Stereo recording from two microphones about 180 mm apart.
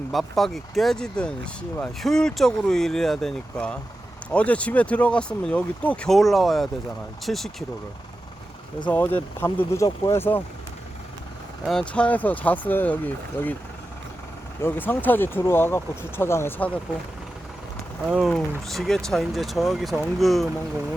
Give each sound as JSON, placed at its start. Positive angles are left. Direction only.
{"t": 0.1, "sound": "speech", "side_deg": 0}
{"t": 8.9, "sound": "speech", "side_deg": 10}
{"t": 11.6, "sound": "speech", "side_deg": 5}
{"t": 14.6, "sound": "speech", "side_deg": 10}
{"t": 18.3, "sound": "speech", "side_deg": 5}